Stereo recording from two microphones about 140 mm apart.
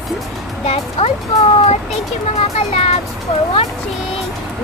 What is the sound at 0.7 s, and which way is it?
Speech, 45° left (ahead or behind).